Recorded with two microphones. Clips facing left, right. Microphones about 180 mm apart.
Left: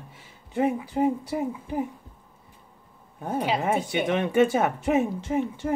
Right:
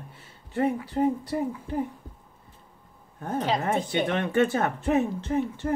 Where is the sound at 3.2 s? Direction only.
10° left (ahead or behind).